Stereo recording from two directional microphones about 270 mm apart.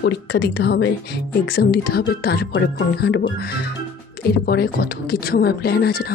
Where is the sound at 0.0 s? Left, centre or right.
Left.